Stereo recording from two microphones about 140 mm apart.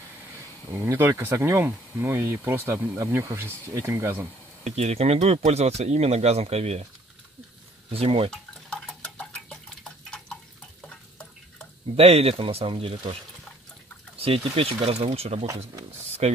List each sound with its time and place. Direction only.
0.8 s speech: 15° right (ahead or behind)
4.6 s speech: 50° right (ahead or behind)
7.9 s speech: 45° right (ahead or behind)
8.3 s dishes: 5° left (ahead or behind)
10.8 s frying: 5° left (ahead or behind)
11.9 s speech: 45° right (ahead or behind)
15.4 s speech: 25° right (ahead or behind)